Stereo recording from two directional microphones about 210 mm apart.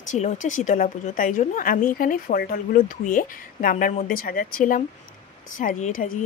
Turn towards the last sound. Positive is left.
turn(degrees=35)  # may be behind; listen again after turning